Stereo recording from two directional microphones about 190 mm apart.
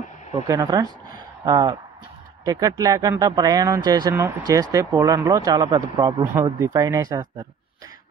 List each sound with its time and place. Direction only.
0.3 s speech: 15° right (ahead or behind)